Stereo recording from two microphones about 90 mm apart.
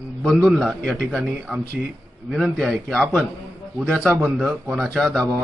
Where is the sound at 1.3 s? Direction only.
Centre (ahead or behind).